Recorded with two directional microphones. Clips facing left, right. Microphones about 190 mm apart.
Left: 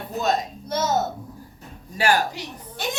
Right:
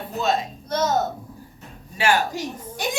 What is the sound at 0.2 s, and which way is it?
Speech, 40° left (ahead or behind).